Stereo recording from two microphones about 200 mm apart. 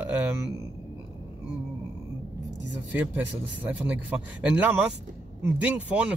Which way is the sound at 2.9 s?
10° right (ahead or behind).